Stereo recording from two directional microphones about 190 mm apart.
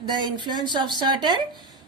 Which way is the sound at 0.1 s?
25° right (ahead or behind).